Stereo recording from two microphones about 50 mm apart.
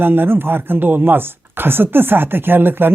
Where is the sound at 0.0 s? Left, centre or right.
Right.